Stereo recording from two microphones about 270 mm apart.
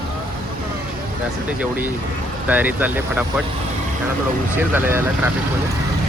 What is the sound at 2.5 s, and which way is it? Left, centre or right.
Speech, centre.